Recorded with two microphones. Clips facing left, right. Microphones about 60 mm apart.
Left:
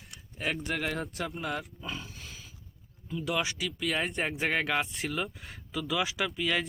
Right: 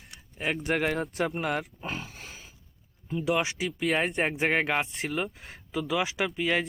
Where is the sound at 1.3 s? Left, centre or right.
Right.